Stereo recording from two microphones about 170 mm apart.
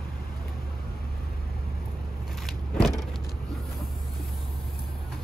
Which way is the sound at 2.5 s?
Centre (ahead or behind).